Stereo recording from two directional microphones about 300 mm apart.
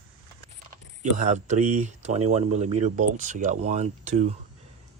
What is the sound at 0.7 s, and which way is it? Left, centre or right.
Speech, right.